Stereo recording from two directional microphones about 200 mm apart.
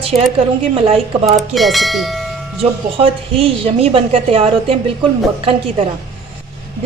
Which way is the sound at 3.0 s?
30° right (ahead or behind).